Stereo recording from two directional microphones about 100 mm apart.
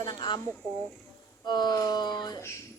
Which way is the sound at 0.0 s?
50° left (ahead or behind).